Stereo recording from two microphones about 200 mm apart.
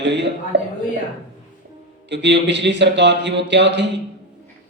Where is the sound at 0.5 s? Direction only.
60° right (ahead or behind).